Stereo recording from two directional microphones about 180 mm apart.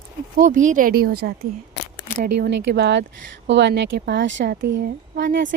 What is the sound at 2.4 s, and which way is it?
Speech, 80° right.